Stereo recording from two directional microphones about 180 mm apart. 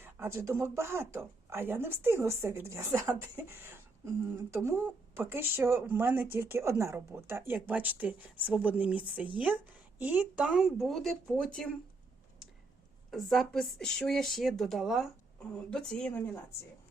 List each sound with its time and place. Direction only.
0.0 s speech: 15° right (ahead or behind); by 11.7 s 5° left (ahead or behind)
13.1 s a woman's voice: centre (ahead or behind)